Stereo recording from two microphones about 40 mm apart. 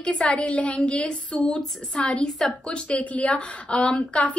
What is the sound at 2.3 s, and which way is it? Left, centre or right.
Speech, centre.